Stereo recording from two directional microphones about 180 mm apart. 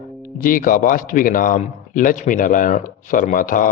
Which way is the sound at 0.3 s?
50° left (ahead or behind).